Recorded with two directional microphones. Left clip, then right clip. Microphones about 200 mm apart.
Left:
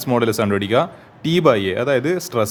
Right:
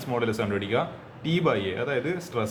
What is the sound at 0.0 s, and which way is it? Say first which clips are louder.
Speech: left 9 dB; 55° left (ahead or behind).